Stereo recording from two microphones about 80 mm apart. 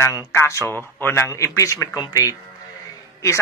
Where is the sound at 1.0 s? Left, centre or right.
Left.